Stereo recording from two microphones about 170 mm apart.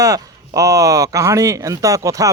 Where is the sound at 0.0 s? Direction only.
20° right (ahead or behind).